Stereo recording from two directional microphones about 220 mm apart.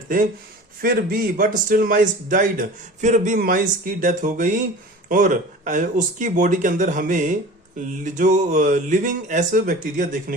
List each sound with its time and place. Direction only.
0.8 s a man's voice: 40° right (ahead or behind)